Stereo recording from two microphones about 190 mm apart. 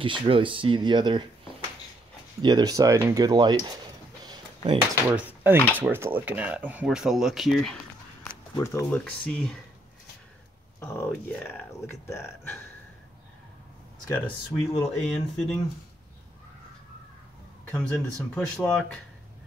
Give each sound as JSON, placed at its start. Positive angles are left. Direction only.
{"t": 0.0, "sound": "speech", "side_deg": -25}
{"t": 2.4, "sound": "speech", "side_deg": -20}
{"t": 4.2, "sound": "a sound", "side_deg": -25}
{"t": 5.1, "sound": "speech", "side_deg": -10}
{"t": 8.2, "sound": "a sound", "side_deg": 5}
{"t": 8.7, "sound": "speech", "side_deg": 5}
{"t": 10.8, "sound": "speech", "side_deg": 10}
{"t": 14.0, "sound": "speech", "side_deg": 10}
{"t": 17.6, "sound": "speech", "side_deg": 5}